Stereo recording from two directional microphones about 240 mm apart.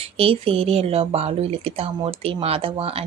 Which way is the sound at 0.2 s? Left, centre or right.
Right.